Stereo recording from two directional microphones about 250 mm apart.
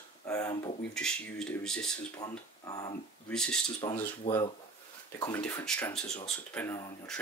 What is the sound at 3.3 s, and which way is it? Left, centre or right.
Speech, centre.